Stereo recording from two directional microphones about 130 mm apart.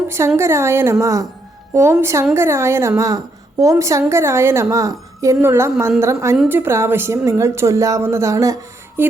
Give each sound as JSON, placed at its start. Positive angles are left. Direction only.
{"t": 0.3, "sound": "a woman's voice", "side_deg": -20}